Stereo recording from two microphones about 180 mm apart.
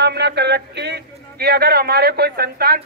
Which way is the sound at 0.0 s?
70° right (ahead or behind).